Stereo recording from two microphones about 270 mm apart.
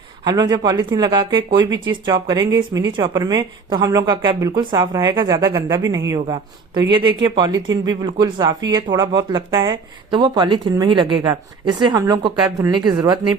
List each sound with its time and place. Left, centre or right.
0.3 s speech: centre
1.7 s speech: right
2.0 s speech: centre